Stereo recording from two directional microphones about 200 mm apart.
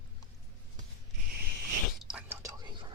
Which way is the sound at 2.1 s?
10° right (ahead or behind).